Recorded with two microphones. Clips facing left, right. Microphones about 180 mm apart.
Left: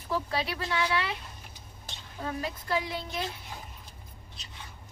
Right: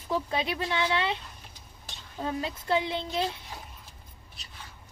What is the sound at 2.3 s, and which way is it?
Speech, 25° right (ahead or behind).